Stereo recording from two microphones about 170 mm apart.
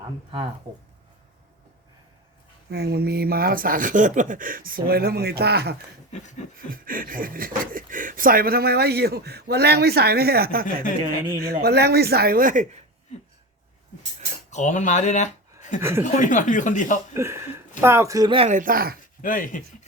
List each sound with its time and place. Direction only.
2.6 s speech: 70° right (ahead or behind)
6.1 s speech: 45° left (ahead or behind)
6.7 s speech: 55° right (ahead or behind)
14.5 s speech: 45° left (ahead or behind)
15.8 s speech: 15° right (ahead or behind)
16.0 s speech: 45° left (ahead or behind)
17.2 s speech: 15° right (ahead or behind)
18.3 s speech: 45° right (ahead or behind)
19.2 s speech: 50° left (ahead or behind)